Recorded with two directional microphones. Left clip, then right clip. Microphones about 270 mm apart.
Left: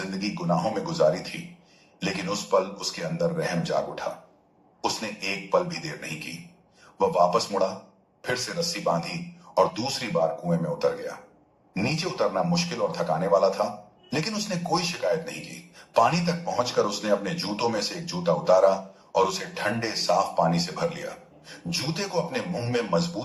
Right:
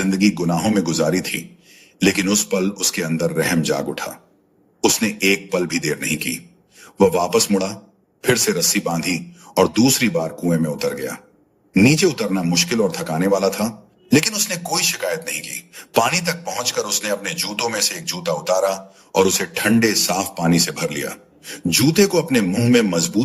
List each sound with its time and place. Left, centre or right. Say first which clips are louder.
0.0 s a man's voice: right 12 dB; right